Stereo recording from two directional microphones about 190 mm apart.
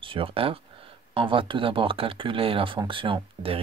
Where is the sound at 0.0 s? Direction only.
30° right (ahead or behind).